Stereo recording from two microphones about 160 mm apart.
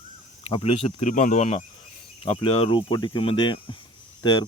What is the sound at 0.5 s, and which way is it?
Speech, 35° left (ahead or behind).